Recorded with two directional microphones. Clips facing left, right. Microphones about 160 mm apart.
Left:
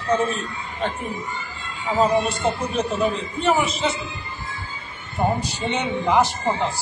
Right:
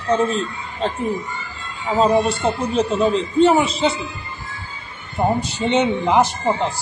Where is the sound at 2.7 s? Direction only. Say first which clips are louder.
Right 5 dB; 25° right (ahead or behind).